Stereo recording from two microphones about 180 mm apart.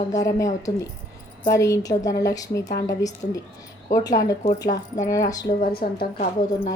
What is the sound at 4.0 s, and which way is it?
A woman's voice, 20° left (ahead or behind).